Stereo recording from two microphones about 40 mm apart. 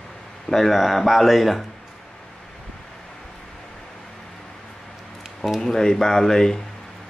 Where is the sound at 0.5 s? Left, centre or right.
Centre.